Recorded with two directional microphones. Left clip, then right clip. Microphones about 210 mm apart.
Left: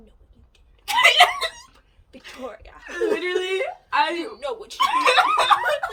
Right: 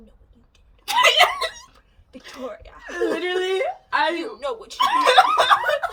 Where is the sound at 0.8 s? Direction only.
15° right (ahead or behind).